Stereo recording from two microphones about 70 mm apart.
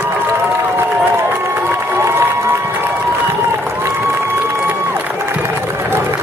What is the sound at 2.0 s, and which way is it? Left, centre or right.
Crowd, right.